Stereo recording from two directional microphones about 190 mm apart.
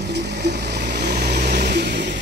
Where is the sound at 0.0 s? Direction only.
60° right (ahead or behind).